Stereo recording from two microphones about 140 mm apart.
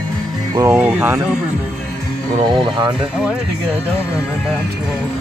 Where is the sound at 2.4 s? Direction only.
35° right (ahead or behind).